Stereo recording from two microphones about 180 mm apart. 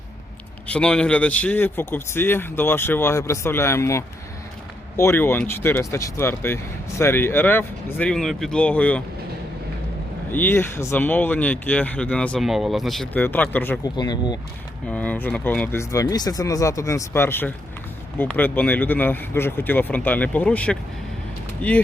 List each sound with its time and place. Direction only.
0.7 s speech: 5° left (ahead or behind)
10.3 s speech: 10° left (ahead or behind)
13.8 s speech: 25° left (ahead or behind)
14.8 s speech: 10° left (ahead or behind)